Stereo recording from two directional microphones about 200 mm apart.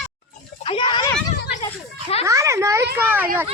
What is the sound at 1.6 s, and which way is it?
Children playing, 30° left (ahead or behind).